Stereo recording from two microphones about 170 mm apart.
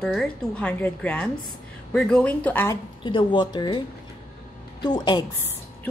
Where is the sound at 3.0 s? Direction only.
30° left (ahead or behind).